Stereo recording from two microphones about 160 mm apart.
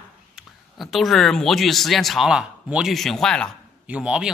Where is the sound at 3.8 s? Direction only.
5° right (ahead or behind).